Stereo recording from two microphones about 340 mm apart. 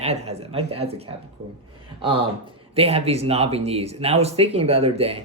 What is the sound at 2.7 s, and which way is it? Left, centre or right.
Speech, centre.